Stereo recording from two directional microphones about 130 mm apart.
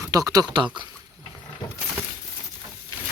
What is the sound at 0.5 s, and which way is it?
Speech, 40° right (ahead or behind).